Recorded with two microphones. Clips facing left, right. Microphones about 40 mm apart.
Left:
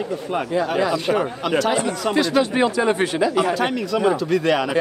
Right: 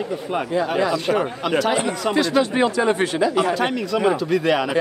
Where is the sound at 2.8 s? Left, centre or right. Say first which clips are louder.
Even; left.